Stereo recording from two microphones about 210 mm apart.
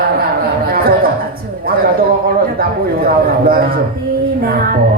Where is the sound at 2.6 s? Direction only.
45° right (ahead or behind).